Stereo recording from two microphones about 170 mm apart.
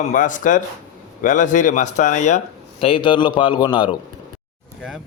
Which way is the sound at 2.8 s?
30° left (ahead or behind).